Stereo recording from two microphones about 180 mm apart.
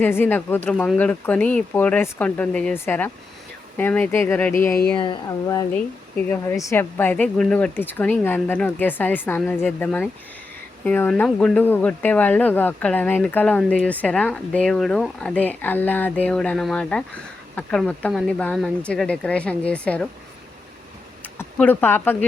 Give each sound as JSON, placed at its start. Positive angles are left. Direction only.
{"t": 0.0, "sound": "speech", "side_deg": 10}
{"t": 5.7, "sound": "speech", "side_deg": 5}
{"t": 21.3, "sound": "speech", "side_deg": 10}